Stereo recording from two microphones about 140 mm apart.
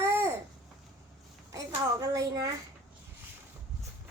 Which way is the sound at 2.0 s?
25° right (ahead or behind).